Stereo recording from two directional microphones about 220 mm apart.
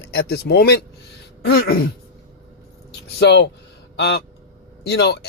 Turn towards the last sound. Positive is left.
turn(degrees=50)  # may be behind; listen again after turning